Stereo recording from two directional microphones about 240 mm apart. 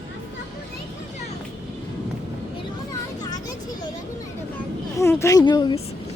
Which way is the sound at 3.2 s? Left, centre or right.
Centre.